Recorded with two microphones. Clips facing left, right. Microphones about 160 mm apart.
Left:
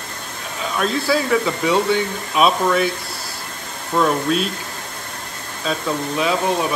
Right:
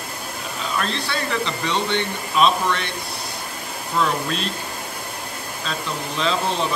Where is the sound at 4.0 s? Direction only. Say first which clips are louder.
Left 5 dB; 5° left (ahead or behind).